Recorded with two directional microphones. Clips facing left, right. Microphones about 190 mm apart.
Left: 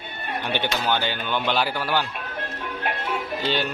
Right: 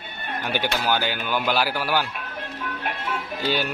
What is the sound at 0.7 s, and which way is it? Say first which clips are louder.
Speech: even; 5° right (ahead or behind).